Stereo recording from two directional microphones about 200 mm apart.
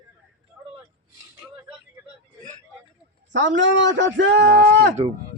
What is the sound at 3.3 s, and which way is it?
Speech, 65° right (ahead or behind).